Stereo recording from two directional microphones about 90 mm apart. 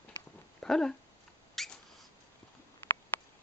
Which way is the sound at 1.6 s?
5° left (ahead or behind).